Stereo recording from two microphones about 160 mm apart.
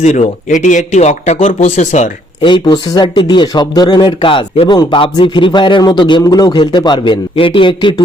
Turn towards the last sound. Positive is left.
turn(degrees=30)  # may be behind; listen again after turning